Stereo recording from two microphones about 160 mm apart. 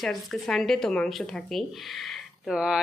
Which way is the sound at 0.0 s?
Centre (ahead or behind).